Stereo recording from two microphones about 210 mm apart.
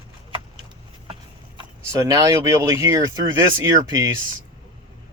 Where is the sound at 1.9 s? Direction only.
15° right (ahead or behind).